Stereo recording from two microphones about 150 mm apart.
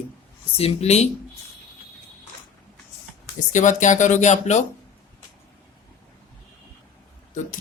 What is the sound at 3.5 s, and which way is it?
Speech, 55° left (ahead or behind).